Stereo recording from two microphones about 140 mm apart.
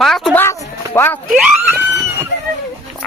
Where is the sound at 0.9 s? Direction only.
15° left (ahead or behind).